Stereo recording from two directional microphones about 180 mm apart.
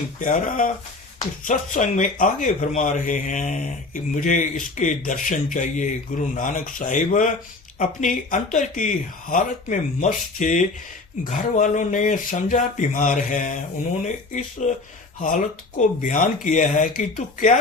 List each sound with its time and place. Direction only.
0.2 s speech: 45° left (ahead or behind)